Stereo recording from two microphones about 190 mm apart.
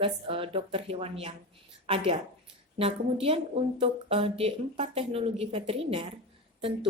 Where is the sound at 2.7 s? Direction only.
30° right (ahead or behind).